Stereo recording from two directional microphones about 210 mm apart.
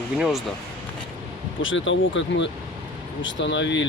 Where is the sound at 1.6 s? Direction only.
65° left (ahead or behind).